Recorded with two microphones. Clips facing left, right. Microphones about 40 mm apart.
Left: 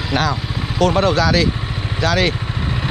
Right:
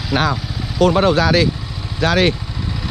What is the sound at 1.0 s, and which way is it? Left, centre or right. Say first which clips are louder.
Speech: right 1 dB; centre.